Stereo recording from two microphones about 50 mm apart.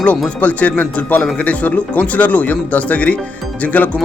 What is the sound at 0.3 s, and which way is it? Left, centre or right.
Speech, left.